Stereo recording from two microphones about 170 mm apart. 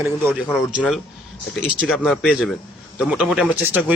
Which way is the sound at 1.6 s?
Centre (ahead or behind).